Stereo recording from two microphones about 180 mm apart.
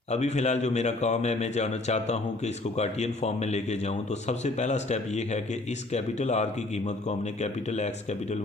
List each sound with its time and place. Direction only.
0.1 s a man's voice: 40° left (ahead or behind)